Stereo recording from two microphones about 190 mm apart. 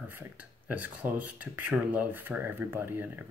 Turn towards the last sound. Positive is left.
turn(degrees=-10)  # may be behind; listen again after turning